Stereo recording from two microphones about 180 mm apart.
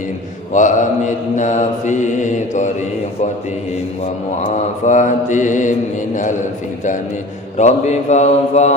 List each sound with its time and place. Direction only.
0.5 s mantra: 45° left (ahead or behind)
4.9 s mantra: 45° left (ahead or behind)